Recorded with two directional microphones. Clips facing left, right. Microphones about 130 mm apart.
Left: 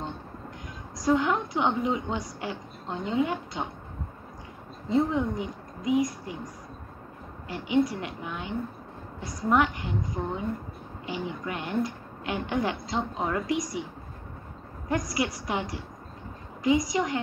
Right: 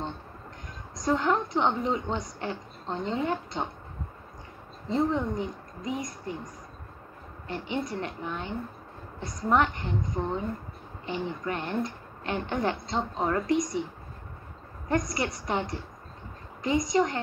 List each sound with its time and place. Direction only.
0.9 s a woman's voice: 5° left (ahead or behind)
4.8 s a woman's voice: 5° left (ahead or behind)
14.9 s a woman's voice: 5° left (ahead or behind)